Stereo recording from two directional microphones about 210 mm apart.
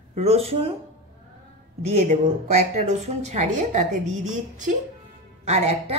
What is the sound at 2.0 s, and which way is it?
A woman's voice, 30° right (ahead or behind).